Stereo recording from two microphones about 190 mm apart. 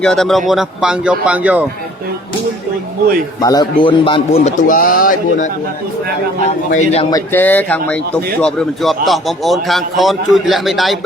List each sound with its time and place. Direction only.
0.0 s a man's voice: centre (ahead or behind)
3.4 s a man's voice: 20° left (ahead or behind)
4.4 s speech: 45° left (ahead or behind)
6.7 s a man's voice: 35° left (ahead or behind)
7.1 s a man's voice: 10° left (ahead or behind)